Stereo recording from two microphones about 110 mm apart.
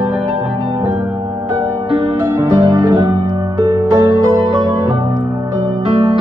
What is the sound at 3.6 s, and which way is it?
Music, 40° right (ahead or behind).